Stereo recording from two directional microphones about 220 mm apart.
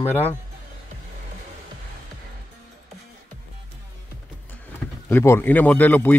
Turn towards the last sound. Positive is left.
turn(degrees=10)  # may be behind; listen again after turning